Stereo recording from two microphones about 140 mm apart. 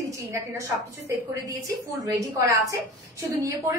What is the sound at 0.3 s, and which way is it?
A woman's voice, 20° right (ahead or behind).